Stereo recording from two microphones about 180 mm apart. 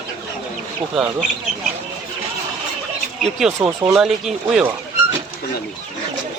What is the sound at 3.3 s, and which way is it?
Speech, 5° right (ahead or behind).